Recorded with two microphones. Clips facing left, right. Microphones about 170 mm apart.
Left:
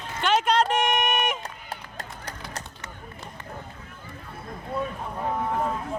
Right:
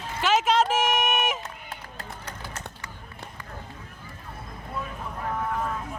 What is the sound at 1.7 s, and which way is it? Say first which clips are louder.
Run: left 2 dB; 35° left (ahead or behind).